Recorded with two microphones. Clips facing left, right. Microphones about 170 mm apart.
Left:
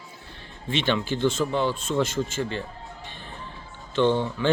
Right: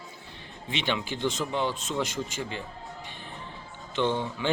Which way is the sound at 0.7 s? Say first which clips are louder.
Left 5 dB; 15° right (ahead or behind).